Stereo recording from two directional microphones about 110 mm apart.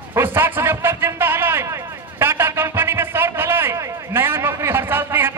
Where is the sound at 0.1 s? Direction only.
20° right (ahead or behind).